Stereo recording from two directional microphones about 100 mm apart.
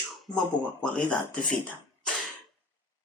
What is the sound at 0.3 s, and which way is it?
Speech, 40° left (ahead or behind).